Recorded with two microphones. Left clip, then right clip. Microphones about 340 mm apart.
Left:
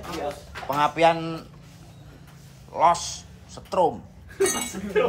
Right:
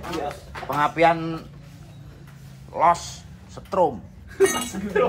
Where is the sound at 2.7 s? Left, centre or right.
Centre.